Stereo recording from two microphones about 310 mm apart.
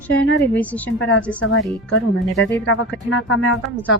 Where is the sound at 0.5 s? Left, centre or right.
Centre.